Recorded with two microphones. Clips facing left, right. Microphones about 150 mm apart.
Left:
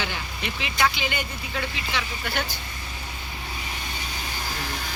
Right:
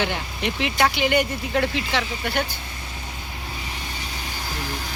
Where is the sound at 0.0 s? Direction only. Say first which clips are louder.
Right 6 dB; 65° right (ahead or behind).